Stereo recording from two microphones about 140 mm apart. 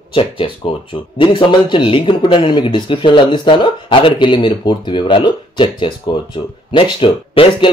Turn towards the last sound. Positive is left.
turn(degrees=40)  # may be behind; listen again after turning